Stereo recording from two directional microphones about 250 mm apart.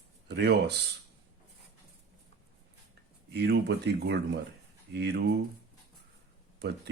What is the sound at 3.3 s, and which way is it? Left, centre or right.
Speech, right.